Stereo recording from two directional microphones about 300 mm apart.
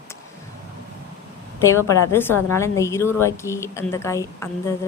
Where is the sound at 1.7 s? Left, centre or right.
Centre.